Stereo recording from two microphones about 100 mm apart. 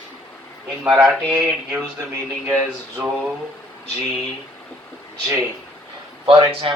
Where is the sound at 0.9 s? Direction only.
5° right (ahead or behind).